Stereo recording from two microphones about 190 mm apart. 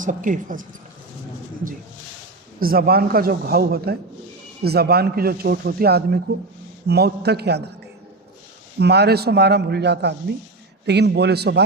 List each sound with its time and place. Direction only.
0.0 s speech: 45° right (ahead or behind)
2.6 s speech: 50° right (ahead or behind)
8.8 s speech: 60° right (ahead or behind)